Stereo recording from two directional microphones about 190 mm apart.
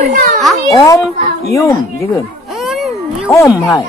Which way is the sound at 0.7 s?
15° left (ahead or behind).